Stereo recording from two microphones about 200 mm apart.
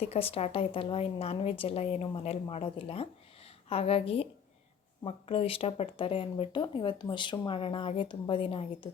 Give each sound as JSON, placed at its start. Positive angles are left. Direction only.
{"t": 0.0, "sound": "speech", "side_deg": 30}